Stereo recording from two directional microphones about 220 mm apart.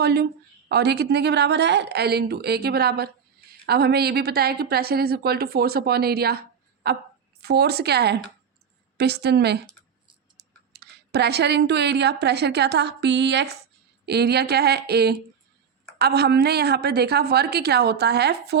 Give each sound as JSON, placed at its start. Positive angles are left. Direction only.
{"t": 0.0, "sound": "a woman's voice", "side_deg": -45}